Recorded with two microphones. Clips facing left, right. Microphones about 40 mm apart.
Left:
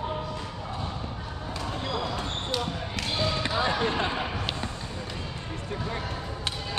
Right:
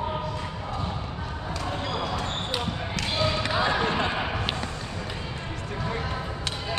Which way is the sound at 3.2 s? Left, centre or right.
Right.